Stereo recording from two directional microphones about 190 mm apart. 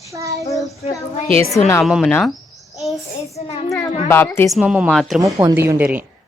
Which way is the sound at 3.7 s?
10° left (ahead or behind).